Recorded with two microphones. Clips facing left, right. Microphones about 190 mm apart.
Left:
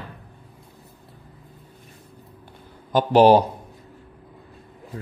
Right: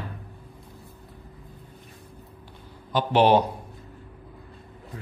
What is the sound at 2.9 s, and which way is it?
Speech, 40° left (ahead or behind).